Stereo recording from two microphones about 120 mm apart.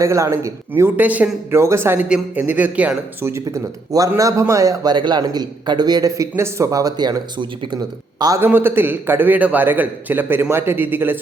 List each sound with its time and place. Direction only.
0.0 s speech: 25° right (ahead or behind)
2.0 s a man's voice: 10° right (ahead or behind)
3.4 s a man's voice: 30° right (ahead or behind)
8.4 s a man's voice: 20° right (ahead or behind)